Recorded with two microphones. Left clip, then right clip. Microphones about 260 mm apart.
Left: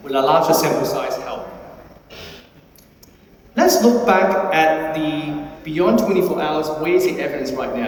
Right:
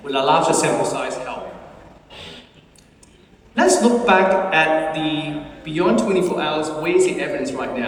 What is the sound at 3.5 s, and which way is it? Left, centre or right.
A woman's voice, centre.